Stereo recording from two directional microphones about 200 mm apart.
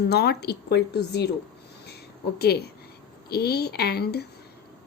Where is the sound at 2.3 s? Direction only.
50° left (ahead or behind).